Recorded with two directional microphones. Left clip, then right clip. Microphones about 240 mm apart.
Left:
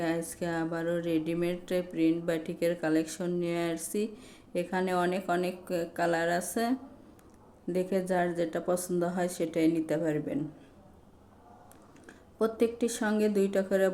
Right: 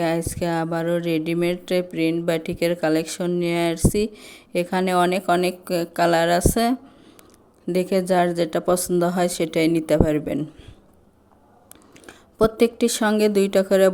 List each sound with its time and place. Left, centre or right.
0.0 s speech: right
12.0 s speech: right